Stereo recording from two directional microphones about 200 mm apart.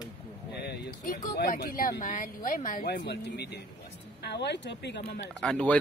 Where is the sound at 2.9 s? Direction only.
55° left (ahead or behind).